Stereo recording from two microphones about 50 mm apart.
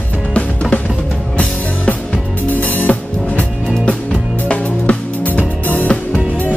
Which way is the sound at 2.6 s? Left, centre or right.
Left.